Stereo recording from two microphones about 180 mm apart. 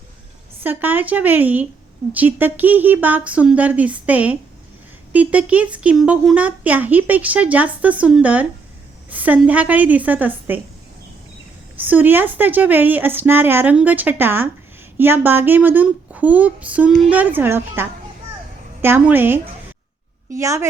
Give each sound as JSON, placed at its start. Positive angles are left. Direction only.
{"t": 0.6, "sound": "speech", "side_deg": -10}
{"t": 11.8, "sound": "speech", "side_deg": -10}